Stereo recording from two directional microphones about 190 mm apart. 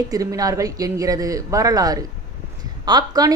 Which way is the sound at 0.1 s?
20° right (ahead or behind).